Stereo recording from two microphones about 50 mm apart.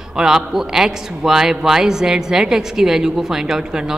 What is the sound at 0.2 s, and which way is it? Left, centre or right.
A woman's voice, centre.